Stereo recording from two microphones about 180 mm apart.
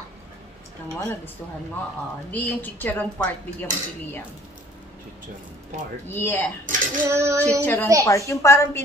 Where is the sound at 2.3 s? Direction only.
10° left (ahead or behind).